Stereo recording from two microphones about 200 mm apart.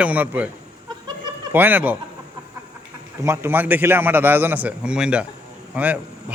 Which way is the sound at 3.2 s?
10° right (ahead or behind).